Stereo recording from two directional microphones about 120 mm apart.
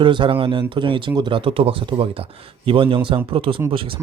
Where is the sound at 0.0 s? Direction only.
40° right (ahead or behind).